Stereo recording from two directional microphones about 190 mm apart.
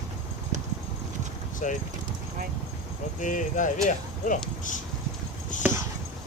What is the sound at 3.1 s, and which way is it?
Speech, 40° left (ahead or behind).